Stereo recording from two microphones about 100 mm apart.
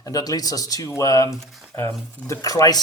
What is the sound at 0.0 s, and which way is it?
Speech, 40° left (ahead or behind).